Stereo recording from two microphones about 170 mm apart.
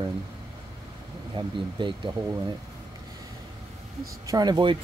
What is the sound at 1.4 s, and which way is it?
Speech, 25° right (ahead or behind).